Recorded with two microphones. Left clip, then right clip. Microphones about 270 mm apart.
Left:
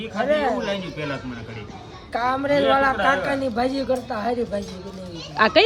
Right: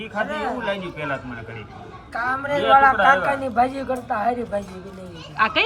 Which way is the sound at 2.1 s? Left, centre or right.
Centre.